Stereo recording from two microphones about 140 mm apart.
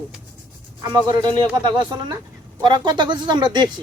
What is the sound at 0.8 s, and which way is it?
Speech, 30° right (ahead or behind).